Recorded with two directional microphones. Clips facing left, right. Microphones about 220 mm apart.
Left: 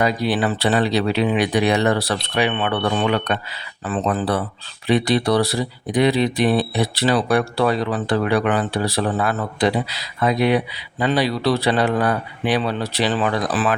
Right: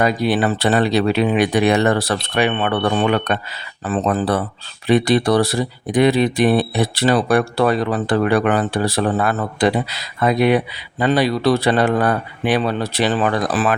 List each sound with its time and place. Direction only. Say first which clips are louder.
0.0 s speech: right 2 dB; 50° right (ahead or behind)